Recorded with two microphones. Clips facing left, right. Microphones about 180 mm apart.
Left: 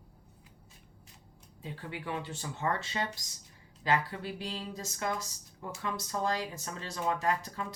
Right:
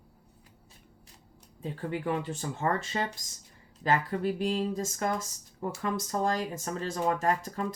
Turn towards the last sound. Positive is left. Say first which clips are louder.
# right 3 dB
turn(degrees=-45)  # may be behind; listen again after turning